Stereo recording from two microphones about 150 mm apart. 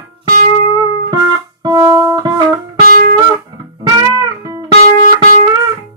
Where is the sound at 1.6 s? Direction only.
25° right (ahead or behind).